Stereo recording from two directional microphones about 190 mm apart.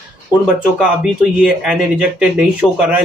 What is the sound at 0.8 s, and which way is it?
Speech, 5° right (ahead or behind).